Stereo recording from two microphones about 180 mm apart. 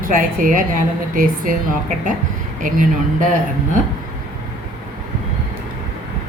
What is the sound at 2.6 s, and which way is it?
Speech, 45° right (ahead or behind).